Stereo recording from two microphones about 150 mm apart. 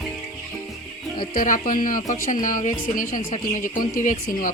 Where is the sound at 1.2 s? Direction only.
65° left (ahead or behind).